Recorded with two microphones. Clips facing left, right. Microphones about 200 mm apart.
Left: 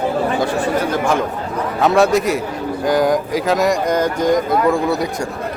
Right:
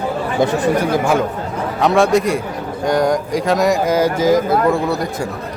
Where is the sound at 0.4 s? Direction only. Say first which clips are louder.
Right 2 dB; 15° right (ahead or behind).